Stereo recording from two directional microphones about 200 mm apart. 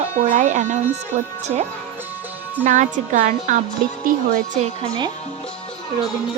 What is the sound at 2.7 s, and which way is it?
Speech, 40° right (ahead or behind).